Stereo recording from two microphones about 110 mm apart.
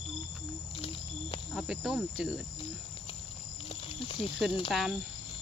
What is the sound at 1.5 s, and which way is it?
Speech, 5° right (ahead or behind).